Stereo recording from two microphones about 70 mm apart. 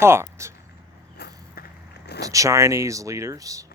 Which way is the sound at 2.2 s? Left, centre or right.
Right.